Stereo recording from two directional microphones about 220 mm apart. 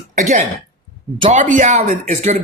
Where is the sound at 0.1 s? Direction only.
35° right (ahead or behind).